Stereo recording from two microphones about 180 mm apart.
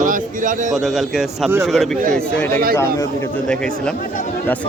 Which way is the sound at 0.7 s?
Centre (ahead or behind).